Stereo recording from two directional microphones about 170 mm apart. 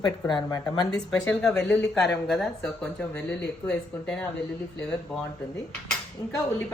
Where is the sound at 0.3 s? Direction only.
25° left (ahead or behind).